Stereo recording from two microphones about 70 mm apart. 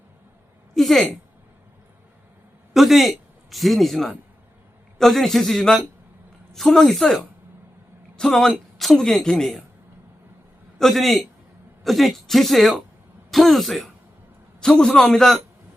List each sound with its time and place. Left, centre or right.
0.7 s a woman's voice: centre
2.7 s a man's voice: centre
10.8 s a man's voice: centre